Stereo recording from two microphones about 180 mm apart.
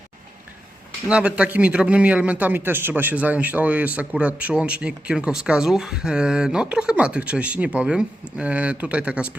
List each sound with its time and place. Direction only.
1.0 s a man's voice: 5° right (ahead or behind)